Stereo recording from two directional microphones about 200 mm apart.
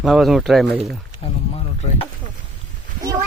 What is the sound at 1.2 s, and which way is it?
Speech, 30° left (ahead or behind).